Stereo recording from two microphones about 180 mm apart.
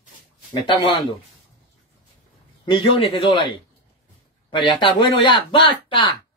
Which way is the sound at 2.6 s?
30° left (ahead or behind).